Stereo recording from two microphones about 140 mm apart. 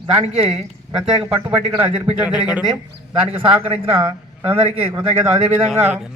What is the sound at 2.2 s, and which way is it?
Speech, 10° right (ahead or behind).